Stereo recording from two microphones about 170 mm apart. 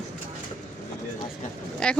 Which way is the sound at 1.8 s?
5° left (ahead or behind).